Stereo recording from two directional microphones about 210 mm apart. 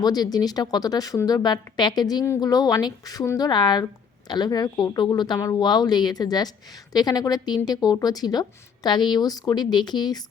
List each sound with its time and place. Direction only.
0.0 s speech: 20° left (ahead or behind)